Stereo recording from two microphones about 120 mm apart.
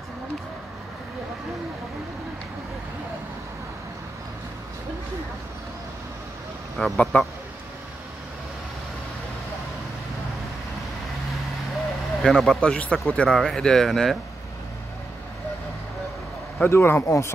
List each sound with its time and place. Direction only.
6.8 s speech: 10° left (ahead or behind)
12.2 s speech: 5° left (ahead or behind)
16.5 s speech: 20° left (ahead or behind)